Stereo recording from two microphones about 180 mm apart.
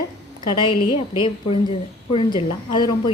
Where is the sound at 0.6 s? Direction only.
25° left (ahead or behind).